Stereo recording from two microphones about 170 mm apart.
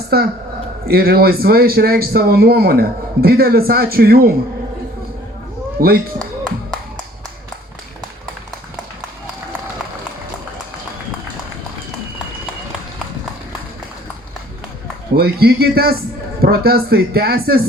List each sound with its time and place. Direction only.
0.1 s a man's voice: 65° right (ahead or behind)
5.8 s speech: 60° right (ahead or behind)
15.1 s speech: 65° right (ahead or behind)